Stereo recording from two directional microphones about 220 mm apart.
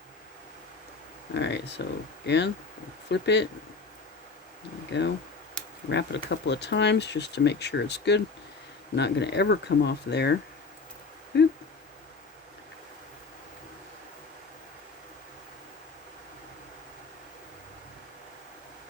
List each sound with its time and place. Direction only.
1.3 s speech: 50° left (ahead or behind)
4.9 s speech: 55° left (ahead or behind)